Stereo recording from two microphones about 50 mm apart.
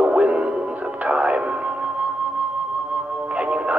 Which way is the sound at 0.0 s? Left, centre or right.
Right.